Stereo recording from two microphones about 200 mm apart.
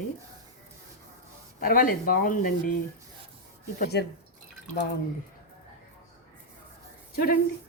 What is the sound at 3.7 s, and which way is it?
Speech, 50° left (ahead or behind).